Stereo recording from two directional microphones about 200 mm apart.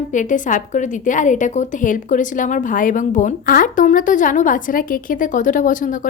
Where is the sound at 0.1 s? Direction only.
40° left (ahead or behind).